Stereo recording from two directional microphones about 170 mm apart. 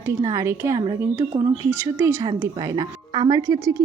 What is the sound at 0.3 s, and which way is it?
Speech, 15° right (ahead or behind).